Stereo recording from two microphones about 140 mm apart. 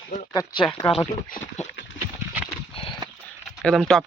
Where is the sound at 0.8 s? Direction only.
40° left (ahead or behind).